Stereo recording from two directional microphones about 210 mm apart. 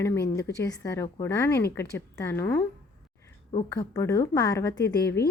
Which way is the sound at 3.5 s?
20° left (ahead or behind).